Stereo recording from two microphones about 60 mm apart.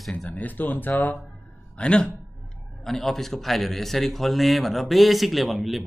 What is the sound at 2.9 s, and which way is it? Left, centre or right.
Speech, centre.